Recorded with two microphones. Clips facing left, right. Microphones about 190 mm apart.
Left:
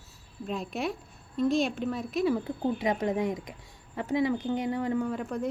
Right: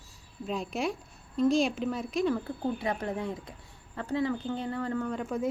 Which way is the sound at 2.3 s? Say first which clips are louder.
Left 2 dB; 15° left (ahead or behind).